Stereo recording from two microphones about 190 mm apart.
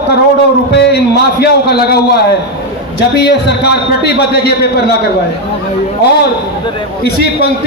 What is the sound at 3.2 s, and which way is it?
A man's voice, 60° left (ahead or behind).